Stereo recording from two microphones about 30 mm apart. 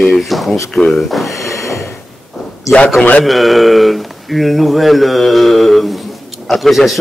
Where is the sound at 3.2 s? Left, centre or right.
Centre.